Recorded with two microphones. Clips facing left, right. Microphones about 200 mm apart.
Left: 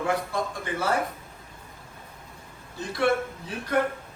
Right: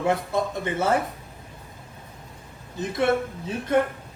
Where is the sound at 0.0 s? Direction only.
25° right (ahead or behind).